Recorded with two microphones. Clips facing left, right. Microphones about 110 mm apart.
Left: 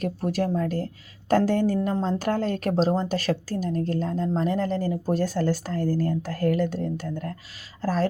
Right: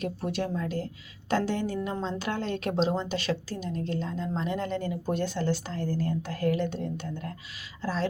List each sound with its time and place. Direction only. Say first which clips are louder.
0.0 s a woman's voice: left 5 dB; 40° left (ahead or behind)